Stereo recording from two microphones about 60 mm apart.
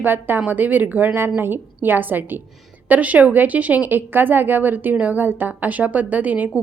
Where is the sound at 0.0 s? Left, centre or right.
Right.